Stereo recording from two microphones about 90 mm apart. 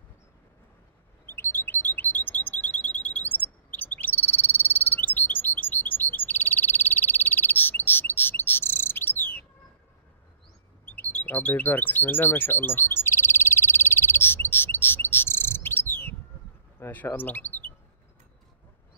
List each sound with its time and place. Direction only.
1.2 s alarm: 25° left (ahead or behind)
10.9 s bird: 20° left (ahead or behind)
16.8 s speech: 25° left (ahead or behind)